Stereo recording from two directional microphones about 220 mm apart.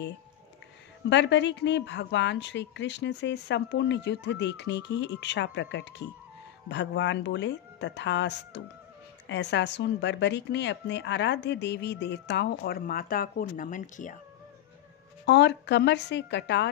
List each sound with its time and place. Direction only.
1.0 s a woman's voice: 55° left (ahead or behind); by 14.2 s 35° left (ahead or behind)
15.2 s a woman's voice: 50° left (ahead or behind)